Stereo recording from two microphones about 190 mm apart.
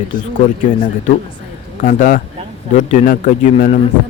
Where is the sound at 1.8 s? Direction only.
45° left (ahead or behind).